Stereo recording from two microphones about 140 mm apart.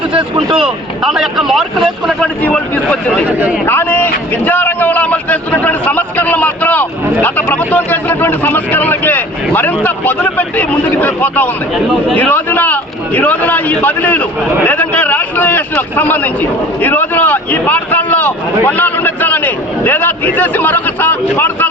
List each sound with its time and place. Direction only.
0.1 s speech: 35° right (ahead or behind)
0.5 s speech: 5° right (ahead or behind)
2.4 s speech: 10° left (ahead or behind)
3.2 s speech: 10° right (ahead or behind)
3.7 s speech: 15° left (ahead or behind)